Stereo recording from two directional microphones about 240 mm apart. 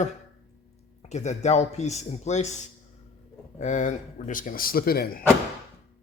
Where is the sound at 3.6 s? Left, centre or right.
Left.